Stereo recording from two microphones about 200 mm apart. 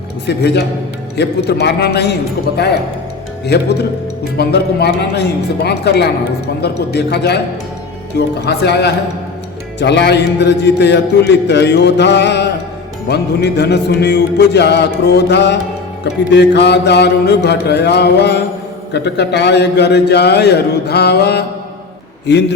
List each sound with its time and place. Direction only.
0.3 s a man's voice: 55° left (ahead or behind)
3.4 s a man's voice: 55° left (ahead or behind)